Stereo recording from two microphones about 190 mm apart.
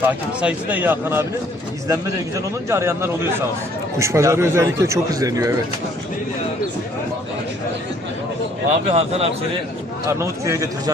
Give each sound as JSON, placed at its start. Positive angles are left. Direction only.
{"t": 0.0, "sound": "speech", "side_deg": -10}
{"t": 8.9, "sound": "speech", "side_deg": -35}
{"t": 10.1, "sound": "speech", "side_deg": -15}